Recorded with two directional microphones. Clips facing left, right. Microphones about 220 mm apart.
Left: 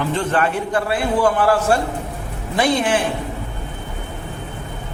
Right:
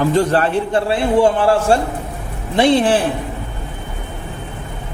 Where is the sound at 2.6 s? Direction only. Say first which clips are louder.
Right 5 dB; 30° right (ahead or behind).